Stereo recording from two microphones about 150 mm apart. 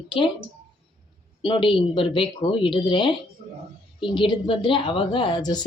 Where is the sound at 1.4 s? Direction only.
35° left (ahead or behind).